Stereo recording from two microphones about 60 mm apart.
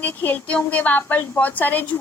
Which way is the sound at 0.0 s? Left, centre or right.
Left.